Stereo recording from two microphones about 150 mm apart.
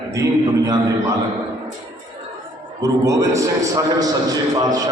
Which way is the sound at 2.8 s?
20° right (ahead or behind).